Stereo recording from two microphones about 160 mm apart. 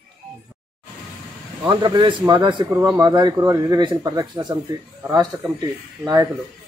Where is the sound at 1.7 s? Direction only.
30° right (ahead or behind).